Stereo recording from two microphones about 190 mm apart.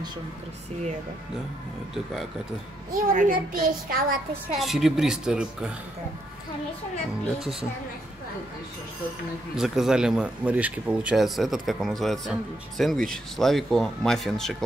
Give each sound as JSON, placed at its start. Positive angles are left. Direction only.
{"t": 2.9, "sound": "a child's voice", "side_deg": -45}
{"t": 4.6, "sound": "speech", "side_deg": 0}
{"t": 9.6, "sound": "speech", "side_deg": 0}